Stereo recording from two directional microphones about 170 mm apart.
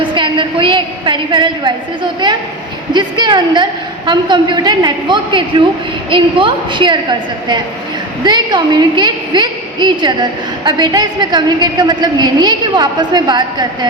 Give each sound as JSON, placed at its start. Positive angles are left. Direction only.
{"t": 0.0, "sound": "a woman's voice", "side_deg": -30}